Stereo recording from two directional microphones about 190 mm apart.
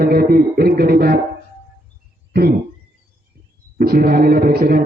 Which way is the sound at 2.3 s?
55° right (ahead or behind).